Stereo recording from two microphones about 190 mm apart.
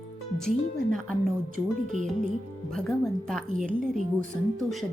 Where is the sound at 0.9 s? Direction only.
Centre (ahead or behind).